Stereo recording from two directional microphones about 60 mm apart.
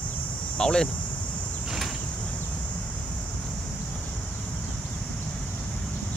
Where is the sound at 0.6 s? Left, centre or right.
Centre.